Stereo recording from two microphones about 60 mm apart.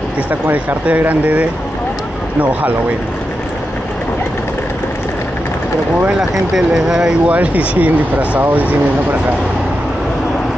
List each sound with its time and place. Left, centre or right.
0.3 s speech: right
6.5 s speech: centre
7.2 s speech: right